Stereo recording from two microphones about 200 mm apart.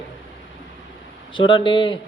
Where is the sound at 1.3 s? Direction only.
25° left (ahead or behind).